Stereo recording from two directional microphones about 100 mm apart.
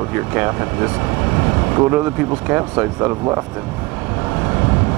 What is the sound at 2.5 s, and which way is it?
Speech, 20° right (ahead or behind).